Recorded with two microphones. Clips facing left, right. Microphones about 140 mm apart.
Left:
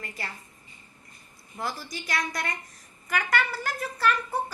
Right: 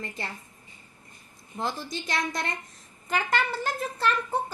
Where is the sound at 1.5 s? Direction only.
25° right (ahead or behind).